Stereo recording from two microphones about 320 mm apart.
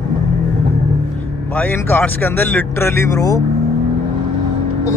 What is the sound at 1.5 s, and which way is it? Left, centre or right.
Speech, centre.